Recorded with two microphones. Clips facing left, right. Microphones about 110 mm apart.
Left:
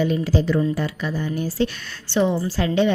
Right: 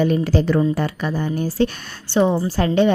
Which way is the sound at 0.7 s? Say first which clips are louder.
Right 3 dB; 50° right (ahead or behind).